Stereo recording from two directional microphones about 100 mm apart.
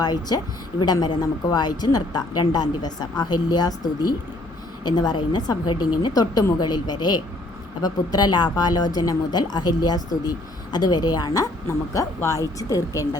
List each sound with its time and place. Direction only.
0.0 s speech: 40° left (ahead or behind)